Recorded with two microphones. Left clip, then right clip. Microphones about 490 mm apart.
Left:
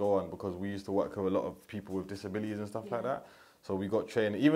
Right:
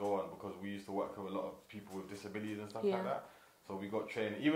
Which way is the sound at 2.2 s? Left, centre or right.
Left.